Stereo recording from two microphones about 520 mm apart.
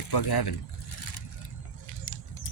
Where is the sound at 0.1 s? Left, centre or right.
Left.